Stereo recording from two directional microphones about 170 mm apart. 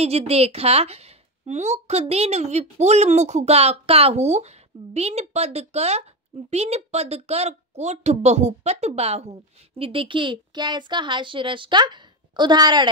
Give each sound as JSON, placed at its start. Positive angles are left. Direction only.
{"t": 0.0, "sound": "speech", "side_deg": -35}